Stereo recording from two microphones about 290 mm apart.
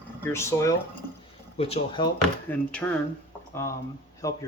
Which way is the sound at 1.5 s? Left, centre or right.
Centre.